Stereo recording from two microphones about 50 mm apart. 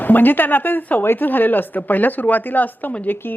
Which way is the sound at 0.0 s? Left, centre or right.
Left.